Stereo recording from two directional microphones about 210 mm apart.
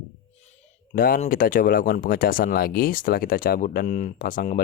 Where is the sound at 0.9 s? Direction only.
40° left (ahead or behind).